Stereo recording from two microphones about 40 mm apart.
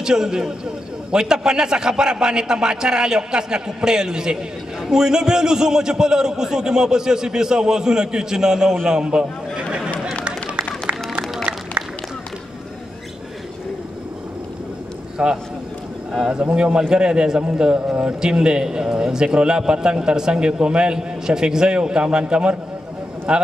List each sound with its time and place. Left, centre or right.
0.0 s a man's voice: centre
10.2 s run: right
15.2 s a man's voice: right
16.3 s a man's voice: right